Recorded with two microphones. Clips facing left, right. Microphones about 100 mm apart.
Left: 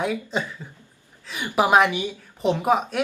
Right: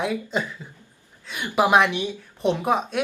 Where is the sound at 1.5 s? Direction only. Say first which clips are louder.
Even; 5° left (ahead or behind).